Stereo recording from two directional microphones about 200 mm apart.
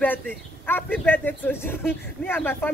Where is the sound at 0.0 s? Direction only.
10° left (ahead or behind).